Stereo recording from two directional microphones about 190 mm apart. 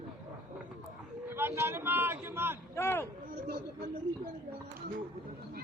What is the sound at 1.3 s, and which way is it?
A man's voice, 15° right (ahead or behind).